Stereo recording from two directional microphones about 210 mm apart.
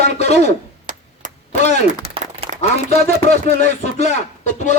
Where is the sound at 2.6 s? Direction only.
30° left (ahead or behind).